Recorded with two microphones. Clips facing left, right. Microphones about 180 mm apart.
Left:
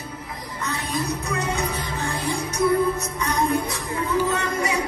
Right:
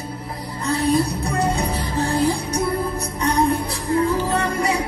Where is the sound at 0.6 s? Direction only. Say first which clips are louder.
Right 9 dB; 35° right (ahead or behind).